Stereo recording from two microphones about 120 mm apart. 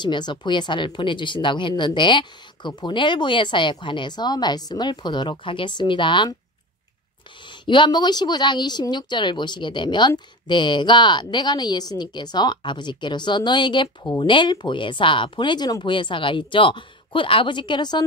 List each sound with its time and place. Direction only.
0.0 s a woman's voice: 40° left (ahead or behind)
7.6 s a woman's voice: 40° left (ahead or behind)